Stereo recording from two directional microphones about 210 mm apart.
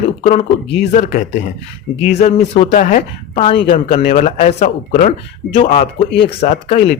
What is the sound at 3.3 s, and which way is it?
Speech, 25° left (ahead or behind).